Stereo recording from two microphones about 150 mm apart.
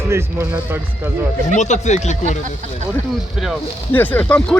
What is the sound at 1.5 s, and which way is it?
Speech, 50° left (ahead or behind).